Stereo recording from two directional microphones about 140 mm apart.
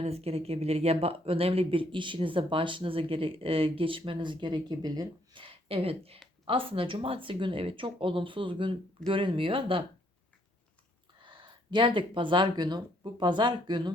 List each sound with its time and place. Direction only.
0.0 s speech: 45° right (ahead or behind)
11.2 s speech: 35° right (ahead or behind)